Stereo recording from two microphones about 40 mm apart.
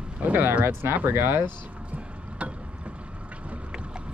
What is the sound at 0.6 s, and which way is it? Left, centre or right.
Speech, right.